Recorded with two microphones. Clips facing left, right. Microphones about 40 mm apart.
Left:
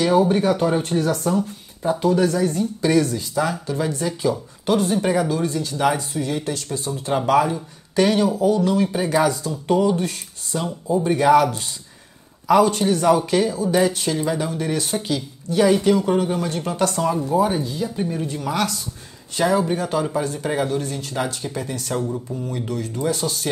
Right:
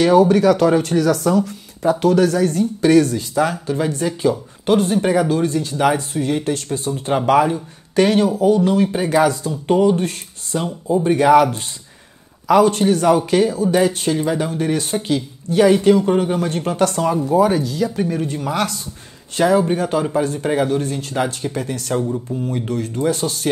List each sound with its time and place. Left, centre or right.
0.0 s speech: right
7.1 s speech: right
17.4 s speech: right
18.0 s speech: right